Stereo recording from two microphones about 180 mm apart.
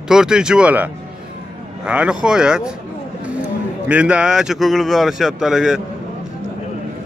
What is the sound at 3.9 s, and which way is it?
A man's voice, 5° right (ahead or behind).